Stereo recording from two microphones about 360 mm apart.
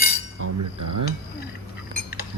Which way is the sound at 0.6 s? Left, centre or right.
Right.